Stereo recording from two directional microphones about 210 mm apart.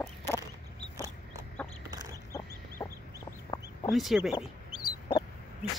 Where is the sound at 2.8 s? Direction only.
15° left (ahead or behind).